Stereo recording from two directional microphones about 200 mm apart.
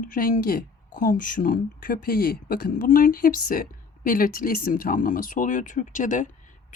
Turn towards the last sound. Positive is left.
turn(degrees=40)  # may be behind; listen again after turning